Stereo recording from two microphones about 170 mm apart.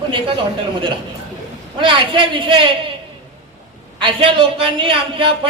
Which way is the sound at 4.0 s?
30° right (ahead or behind).